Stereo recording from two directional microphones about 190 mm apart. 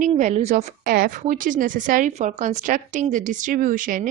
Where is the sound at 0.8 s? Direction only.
50° right (ahead or behind).